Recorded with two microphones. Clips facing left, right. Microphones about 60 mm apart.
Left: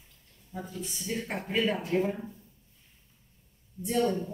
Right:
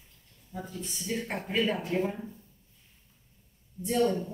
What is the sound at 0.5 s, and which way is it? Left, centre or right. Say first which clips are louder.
Speech: even; centre.